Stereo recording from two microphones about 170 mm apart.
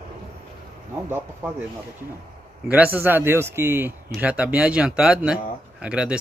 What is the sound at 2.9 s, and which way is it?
Speech, 10° right (ahead or behind).